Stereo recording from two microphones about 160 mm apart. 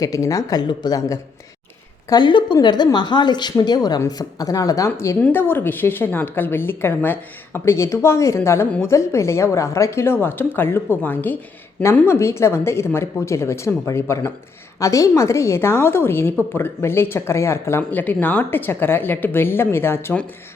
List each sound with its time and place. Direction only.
0.0 s speech: 20° left (ahead or behind)